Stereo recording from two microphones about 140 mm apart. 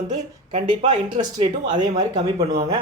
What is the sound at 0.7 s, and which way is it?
A man's voice, 35° right (ahead or behind).